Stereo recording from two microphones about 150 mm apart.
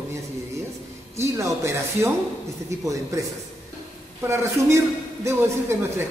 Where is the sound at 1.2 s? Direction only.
20° right (ahead or behind).